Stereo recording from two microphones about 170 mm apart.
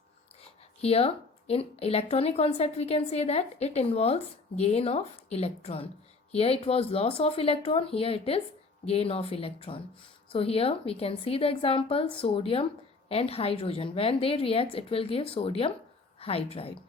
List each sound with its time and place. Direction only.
0.8 s speech: 35° left (ahead or behind)